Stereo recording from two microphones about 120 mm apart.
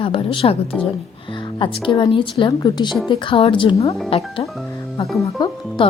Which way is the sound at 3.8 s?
55° left (ahead or behind).